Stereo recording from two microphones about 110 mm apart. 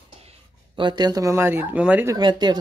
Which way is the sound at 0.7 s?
40° right (ahead or behind).